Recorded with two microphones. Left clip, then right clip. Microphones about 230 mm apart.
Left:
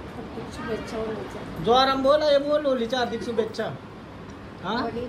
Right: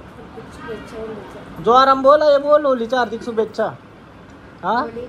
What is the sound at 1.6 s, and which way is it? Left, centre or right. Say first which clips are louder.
A man's voice: right 8 dB; centre.